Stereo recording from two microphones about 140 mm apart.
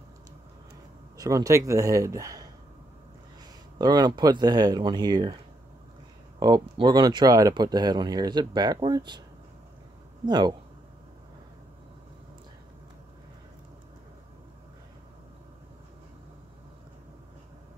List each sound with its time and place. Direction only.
1.1 s speech: 25° right (ahead or behind)
3.7 s speech: 30° right (ahead or behind)
6.4 s speech: 30° right (ahead or behind)
10.2 s speech: 30° right (ahead or behind)